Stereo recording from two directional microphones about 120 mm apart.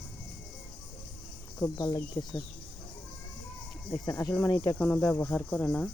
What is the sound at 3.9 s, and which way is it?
Speech, 35° left (ahead or behind).